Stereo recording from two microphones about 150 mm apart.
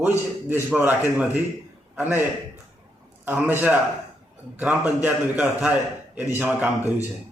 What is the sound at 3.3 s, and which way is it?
A man's voice, 15° right (ahead or behind).